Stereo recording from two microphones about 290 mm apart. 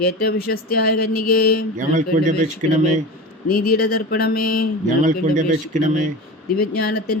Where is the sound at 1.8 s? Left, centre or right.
Right.